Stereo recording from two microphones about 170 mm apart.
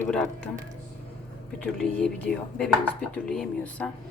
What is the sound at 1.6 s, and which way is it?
Speech, 5° left (ahead or behind).